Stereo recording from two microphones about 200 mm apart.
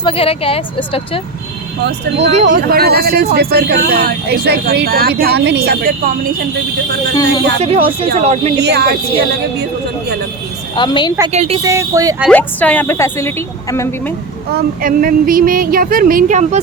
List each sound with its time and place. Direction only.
0.0 s speech: 30° left (ahead or behind)
1.8 s speech: 60° right (ahead or behind)
2.3 s speech: 40° right (ahead or behind)
7.6 s speech: 30° right (ahead or behind)
8.6 s speech: 55° right (ahead or behind)
10.8 s speech: 20° left (ahead or behind)
11.3 s speech: 30° right (ahead or behind)
11.6 s speech: 15° right (ahead or behind)
12.3 s a woman's voice: 5° left (ahead or behind)
14.5 s speech: 45° right (ahead or behind)